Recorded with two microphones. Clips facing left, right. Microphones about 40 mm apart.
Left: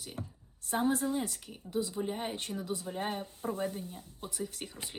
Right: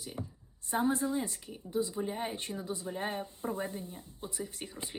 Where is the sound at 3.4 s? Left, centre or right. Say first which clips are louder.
Left 2 dB; right.